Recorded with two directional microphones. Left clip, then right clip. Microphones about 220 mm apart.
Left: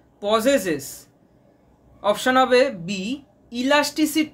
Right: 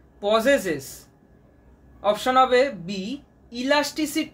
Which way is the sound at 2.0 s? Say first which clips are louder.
Left 1 dB; 25° left (ahead or behind).